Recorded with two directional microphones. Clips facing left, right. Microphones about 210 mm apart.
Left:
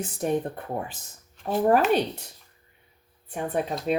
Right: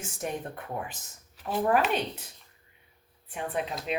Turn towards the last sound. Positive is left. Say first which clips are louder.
# left 5 dB
turn(degrees=45)  # may be behind; listen again after turning